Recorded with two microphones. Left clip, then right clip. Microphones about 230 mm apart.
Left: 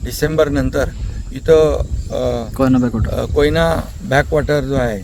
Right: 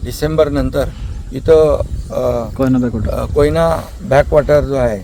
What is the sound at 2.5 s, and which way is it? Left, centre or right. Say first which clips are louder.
Speech: even; left.